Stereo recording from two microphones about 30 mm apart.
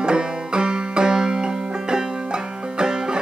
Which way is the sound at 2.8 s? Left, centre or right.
Right.